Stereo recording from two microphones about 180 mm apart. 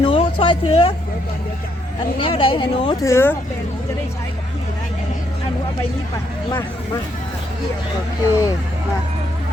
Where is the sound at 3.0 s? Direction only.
15° left (ahead or behind).